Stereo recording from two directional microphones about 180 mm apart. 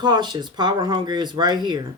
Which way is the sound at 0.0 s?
25° right (ahead or behind).